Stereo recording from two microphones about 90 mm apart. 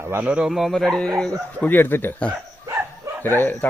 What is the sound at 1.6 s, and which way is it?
A man's voice, 20° left (ahead or behind).